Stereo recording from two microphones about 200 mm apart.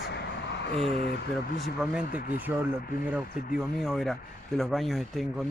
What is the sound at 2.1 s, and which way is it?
Speech, 45° left (ahead or behind).